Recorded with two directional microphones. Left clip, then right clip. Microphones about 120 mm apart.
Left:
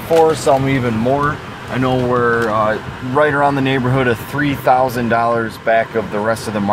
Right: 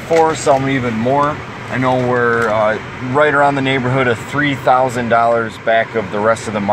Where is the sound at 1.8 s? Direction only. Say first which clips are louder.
Right 1 dB; 35° left (ahead or behind).